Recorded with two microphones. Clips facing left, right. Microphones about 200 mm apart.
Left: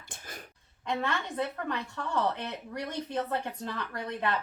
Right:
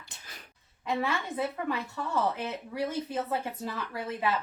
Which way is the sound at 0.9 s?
5° right (ahead or behind).